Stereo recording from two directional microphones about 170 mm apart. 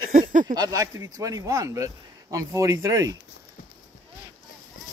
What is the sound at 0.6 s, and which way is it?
Speech, 20° right (ahead or behind).